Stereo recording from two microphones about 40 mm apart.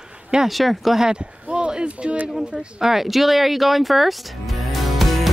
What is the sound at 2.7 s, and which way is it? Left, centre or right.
Speech, centre.